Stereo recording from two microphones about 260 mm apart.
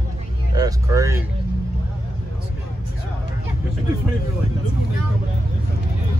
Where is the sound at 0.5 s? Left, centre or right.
Centre.